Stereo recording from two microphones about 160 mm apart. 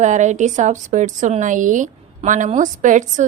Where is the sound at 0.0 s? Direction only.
50° right (ahead or behind).